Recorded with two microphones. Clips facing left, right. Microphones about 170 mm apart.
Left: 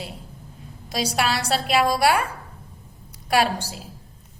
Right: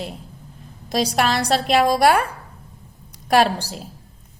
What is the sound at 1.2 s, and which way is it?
A woman's voice, 40° right (ahead or behind).